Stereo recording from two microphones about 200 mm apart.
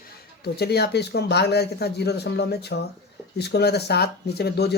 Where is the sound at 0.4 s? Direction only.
55° left (ahead or behind).